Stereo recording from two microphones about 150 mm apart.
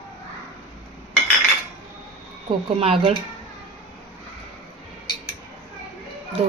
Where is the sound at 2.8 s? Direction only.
40° right (ahead or behind).